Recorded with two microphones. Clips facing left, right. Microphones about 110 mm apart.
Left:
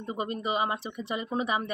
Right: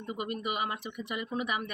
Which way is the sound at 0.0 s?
30° left (ahead or behind).